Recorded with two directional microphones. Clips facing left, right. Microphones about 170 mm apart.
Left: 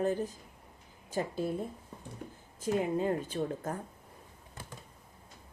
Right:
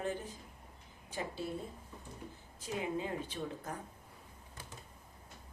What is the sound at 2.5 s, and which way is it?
Speech, 45° left (ahead or behind).